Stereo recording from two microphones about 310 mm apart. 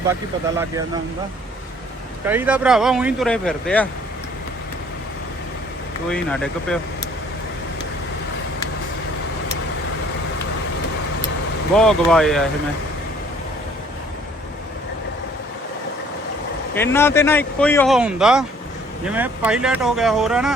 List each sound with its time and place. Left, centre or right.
0.1 s speech: centre
2.2 s speech: centre
6.1 s speech: centre
11.8 s speech: centre
16.7 s speech: centre